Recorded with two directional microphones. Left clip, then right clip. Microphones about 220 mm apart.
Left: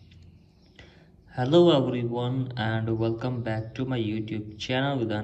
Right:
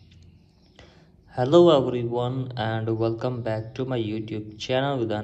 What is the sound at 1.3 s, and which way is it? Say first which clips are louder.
Speech: right 3 dB; 15° right (ahead or behind).